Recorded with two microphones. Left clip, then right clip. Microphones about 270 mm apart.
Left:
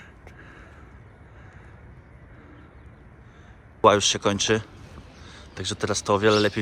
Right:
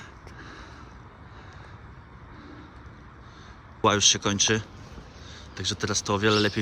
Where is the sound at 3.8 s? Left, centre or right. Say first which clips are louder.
Left 3 dB; centre.